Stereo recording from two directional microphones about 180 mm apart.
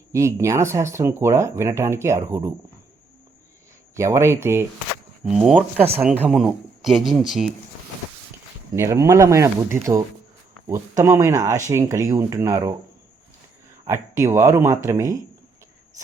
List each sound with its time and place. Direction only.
0.1 s speech: 15° right (ahead or behind)
3.9 s speech: 15° right (ahead or behind)
8.7 s speech: 15° right (ahead or behind)
13.8 s speech: 15° right (ahead or behind)